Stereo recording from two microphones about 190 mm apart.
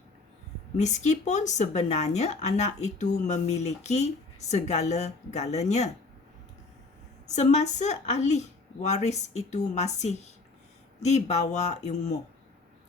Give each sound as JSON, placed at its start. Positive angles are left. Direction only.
{"t": 0.8, "sound": "speech", "side_deg": 40}
{"t": 7.3, "sound": "speech", "side_deg": 40}